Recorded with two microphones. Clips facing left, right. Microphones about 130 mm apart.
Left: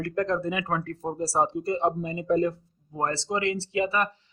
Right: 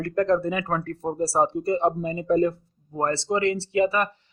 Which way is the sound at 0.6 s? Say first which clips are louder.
Right 2 dB; 60° right (ahead or behind).